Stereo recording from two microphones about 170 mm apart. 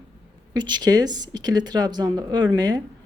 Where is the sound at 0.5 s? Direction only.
25° right (ahead or behind).